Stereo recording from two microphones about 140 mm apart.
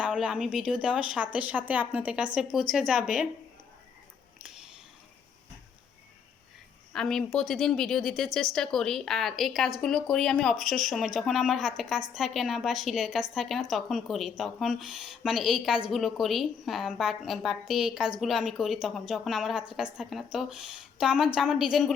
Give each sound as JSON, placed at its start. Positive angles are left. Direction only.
{"t": 0.0, "sound": "speech", "side_deg": -5}
{"t": 6.9, "sound": "speech", "side_deg": 5}